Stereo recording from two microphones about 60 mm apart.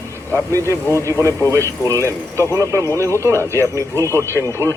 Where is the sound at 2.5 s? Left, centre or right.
Right.